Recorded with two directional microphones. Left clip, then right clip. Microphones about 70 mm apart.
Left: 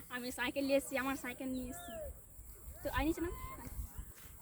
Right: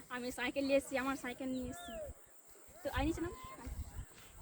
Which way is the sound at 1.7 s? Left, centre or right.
Left.